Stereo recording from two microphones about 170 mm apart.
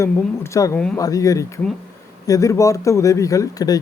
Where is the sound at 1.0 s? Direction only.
20° left (ahead or behind).